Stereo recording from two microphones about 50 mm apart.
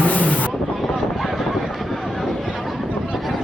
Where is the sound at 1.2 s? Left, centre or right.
Centre.